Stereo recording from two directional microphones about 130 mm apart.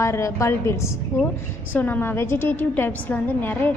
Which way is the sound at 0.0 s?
20° left (ahead or behind).